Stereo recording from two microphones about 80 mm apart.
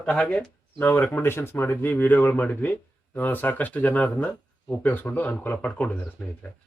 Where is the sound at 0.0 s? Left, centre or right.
Centre.